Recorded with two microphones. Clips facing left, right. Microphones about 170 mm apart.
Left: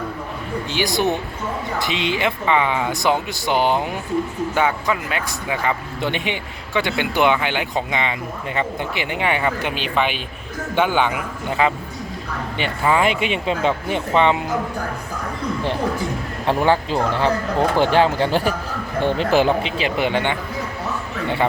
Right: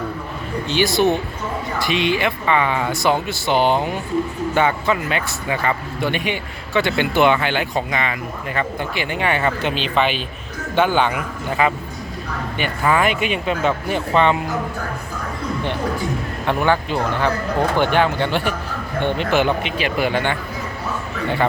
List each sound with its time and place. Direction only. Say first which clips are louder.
0.7 s speech: right 4 dB; 15° left (ahead or behind)
3.6 s speech: right 2 dB; 20° right (ahead or behind)
4.5 s speech: right 2 dB; 10° left (ahead or behind)
6.0 s speech: right 1 dB; 20° left (ahead or behind)
12.5 s speech: even; 25° left (ahead or behind)
16.5 s speech: left 1 dB; 30° left (ahead or behind)